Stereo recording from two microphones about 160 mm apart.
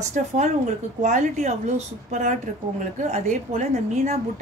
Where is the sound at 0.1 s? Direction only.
50° right (ahead or behind).